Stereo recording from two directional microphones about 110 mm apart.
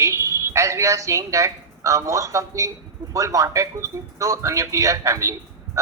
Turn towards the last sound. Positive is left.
turn(degrees=-30)  # may be behind; listen again after turning